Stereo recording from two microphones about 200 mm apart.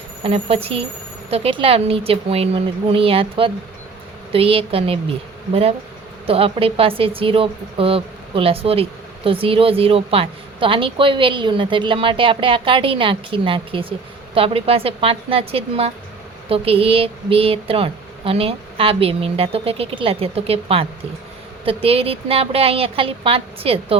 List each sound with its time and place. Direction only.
0.2 s a woman's voice: 30° right (ahead or behind)
6.2 s a woman's voice: 30° right (ahead or behind)